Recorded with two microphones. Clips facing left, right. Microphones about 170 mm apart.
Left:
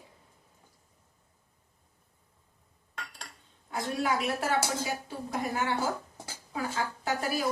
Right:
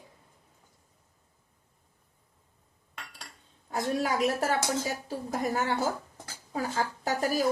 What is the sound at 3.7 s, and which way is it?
A woman's voice, 40° right (ahead or behind).